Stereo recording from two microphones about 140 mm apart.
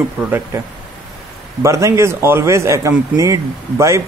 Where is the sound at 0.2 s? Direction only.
15° right (ahead or behind).